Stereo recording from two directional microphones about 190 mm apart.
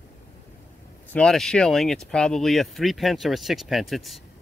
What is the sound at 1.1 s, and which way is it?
Speech, 5° left (ahead or behind).